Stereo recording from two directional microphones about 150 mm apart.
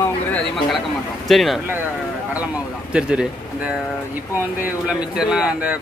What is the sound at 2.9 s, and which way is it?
Speech, 5° right (ahead or behind).